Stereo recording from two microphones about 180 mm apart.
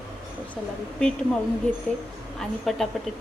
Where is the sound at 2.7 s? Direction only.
Centre (ahead or behind).